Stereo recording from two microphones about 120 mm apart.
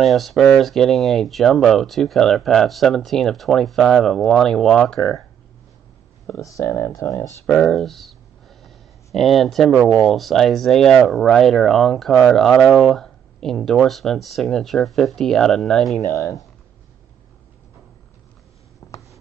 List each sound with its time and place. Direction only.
0.0 s speech: centre (ahead or behind)
6.2 s speech: 25° left (ahead or behind)
7.4 s a sound: 5° left (ahead or behind)
9.9 s speech: centre (ahead or behind)
18.8 s writing: 30° left (ahead or behind)